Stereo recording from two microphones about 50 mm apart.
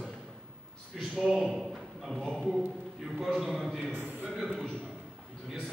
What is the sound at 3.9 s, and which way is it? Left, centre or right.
Speech, right.